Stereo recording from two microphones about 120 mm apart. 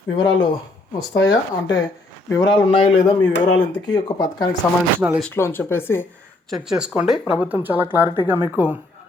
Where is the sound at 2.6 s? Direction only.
45° left (ahead or behind).